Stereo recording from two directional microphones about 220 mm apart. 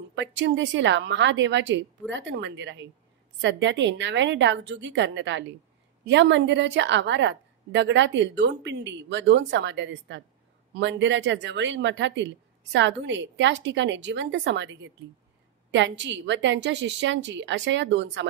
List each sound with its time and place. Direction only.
0.1 s a woman's voice: 55° right (ahead or behind)